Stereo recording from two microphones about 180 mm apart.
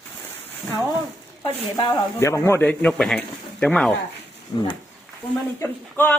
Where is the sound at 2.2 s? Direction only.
15° left (ahead or behind).